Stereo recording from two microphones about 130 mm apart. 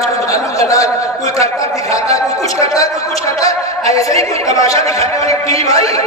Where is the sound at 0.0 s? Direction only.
25° left (ahead or behind).